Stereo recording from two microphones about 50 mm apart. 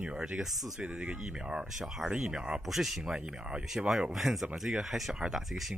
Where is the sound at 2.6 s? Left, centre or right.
Centre.